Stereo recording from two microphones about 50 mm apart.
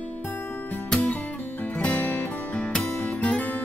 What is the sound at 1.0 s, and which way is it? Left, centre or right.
Music, left.